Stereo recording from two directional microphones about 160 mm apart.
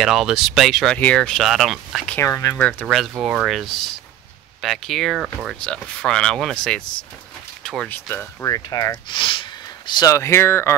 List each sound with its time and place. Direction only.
0.0 s speech: centre (ahead or behind)
2.1 s speech: 15° left (ahead or behind)
8.1 s speech: 15° left (ahead or behind)